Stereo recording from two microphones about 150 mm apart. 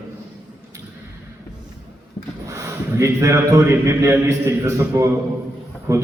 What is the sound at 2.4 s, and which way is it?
A man's voice, 20° right (ahead or behind).